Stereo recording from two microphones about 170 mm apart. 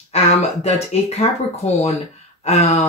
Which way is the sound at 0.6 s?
40° left (ahead or behind).